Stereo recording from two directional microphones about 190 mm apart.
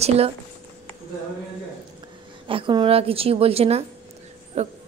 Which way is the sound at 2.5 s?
25° right (ahead or behind).